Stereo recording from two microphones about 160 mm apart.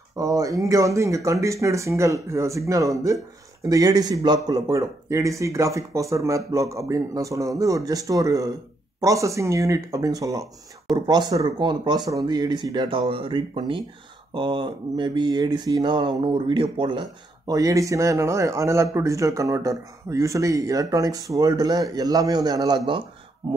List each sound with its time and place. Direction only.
0.1 s a man's voice: 20° right (ahead or behind)